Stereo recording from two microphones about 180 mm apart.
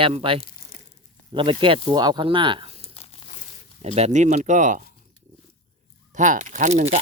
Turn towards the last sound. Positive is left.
turn(degrees=-35)  # may be behind; listen again after turning